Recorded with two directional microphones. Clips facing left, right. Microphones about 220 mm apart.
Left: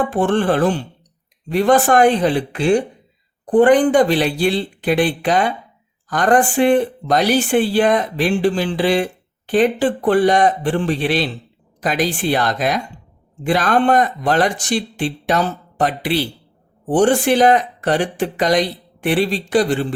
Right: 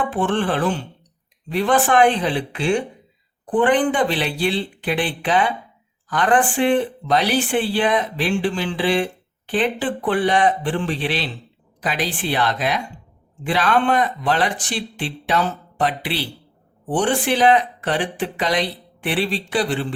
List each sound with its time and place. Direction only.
0.0 s chopping: 40° left (ahead or behind)
1.5 s speech: 45° left (ahead or behind)